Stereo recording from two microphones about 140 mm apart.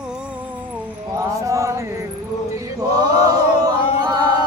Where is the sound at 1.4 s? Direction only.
20° right (ahead or behind).